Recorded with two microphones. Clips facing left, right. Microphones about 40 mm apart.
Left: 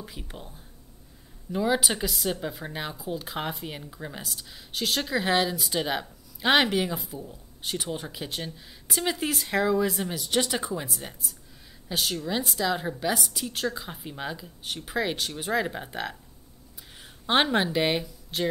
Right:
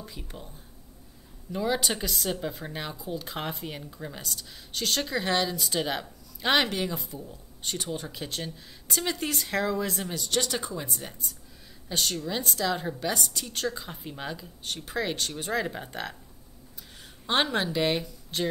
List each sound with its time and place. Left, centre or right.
0.0 s speech: centre
1.5 s speech: centre
10.9 s speech: centre
17.3 s speech: centre
18.3 s speech: centre